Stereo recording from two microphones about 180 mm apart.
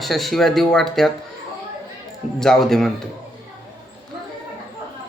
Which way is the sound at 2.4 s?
Centre (ahead or behind).